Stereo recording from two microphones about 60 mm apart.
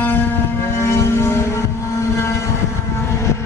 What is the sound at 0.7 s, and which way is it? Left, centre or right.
Vehicle, left.